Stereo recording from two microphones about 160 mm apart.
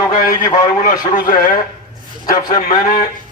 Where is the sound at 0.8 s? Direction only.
55° left (ahead or behind).